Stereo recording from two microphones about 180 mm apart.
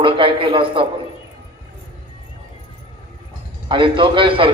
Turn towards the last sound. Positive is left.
turn(degrees=-30)  # may be behind; listen again after turning